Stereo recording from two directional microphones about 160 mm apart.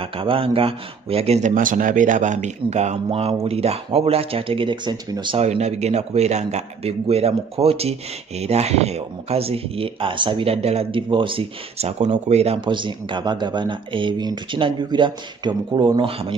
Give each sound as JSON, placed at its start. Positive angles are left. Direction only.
{"t": 0.0, "sound": "speech", "side_deg": -35}
{"t": 1.5, "sound": "a man's voice", "side_deg": -55}
{"t": 5.4, "sound": "speech", "side_deg": -40}
{"t": 12.0, "sound": "speech", "side_deg": -45}